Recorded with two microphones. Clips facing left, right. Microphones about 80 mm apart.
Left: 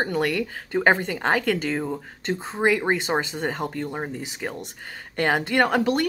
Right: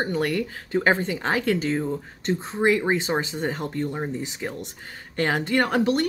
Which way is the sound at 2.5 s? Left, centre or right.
Left.